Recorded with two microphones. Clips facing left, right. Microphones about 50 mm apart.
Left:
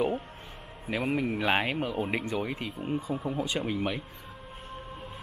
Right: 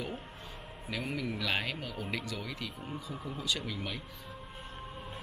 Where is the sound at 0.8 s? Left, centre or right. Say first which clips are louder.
Left 7 dB; left.